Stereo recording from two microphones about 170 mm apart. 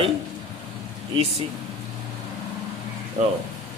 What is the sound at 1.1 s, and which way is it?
Speech, 35° right (ahead or behind).